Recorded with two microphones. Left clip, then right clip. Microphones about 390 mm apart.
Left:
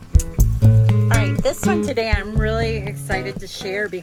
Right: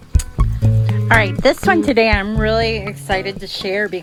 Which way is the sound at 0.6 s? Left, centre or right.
Centre.